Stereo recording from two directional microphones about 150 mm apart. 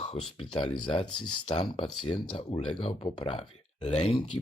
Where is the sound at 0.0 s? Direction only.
40° left (ahead or behind).